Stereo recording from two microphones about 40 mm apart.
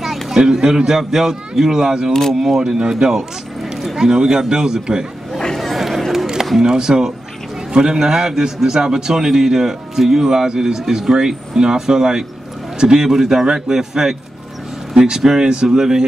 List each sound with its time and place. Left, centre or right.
0.0 s a man's voice: centre
5.6 s a sound: centre
6.6 s a man's voice: centre